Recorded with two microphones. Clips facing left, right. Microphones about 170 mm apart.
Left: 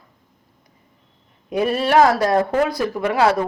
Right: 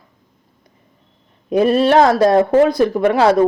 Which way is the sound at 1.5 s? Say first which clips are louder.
Right 5 dB; 25° right (ahead or behind).